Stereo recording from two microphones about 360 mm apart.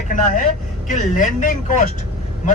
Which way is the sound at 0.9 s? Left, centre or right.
Left.